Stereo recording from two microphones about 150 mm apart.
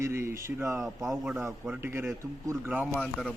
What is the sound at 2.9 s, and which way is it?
Speech, 5° left (ahead or behind).